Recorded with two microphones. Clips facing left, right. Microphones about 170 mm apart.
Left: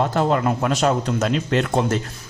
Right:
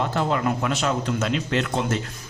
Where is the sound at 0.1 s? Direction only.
45° left (ahead or behind).